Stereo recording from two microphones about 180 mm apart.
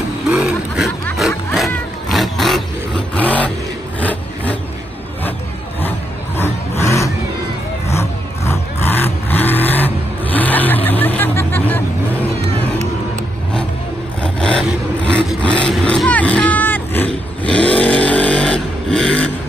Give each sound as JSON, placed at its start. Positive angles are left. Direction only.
{"t": 0.3, "sound": "vehicle", "side_deg": -5}
{"t": 1.1, "sound": "music", "side_deg": 0}
{"t": 1.7, "sound": "vehicle", "side_deg": 0}
{"t": 4.0, "sound": "a sound", "side_deg": 10}
{"t": 5.8, "sound": "a sound", "side_deg": 10}
{"t": 6.8, "sound": "vehicle", "side_deg": 15}
{"t": 14.2, "sound": "vehicle", "side_deg": 5}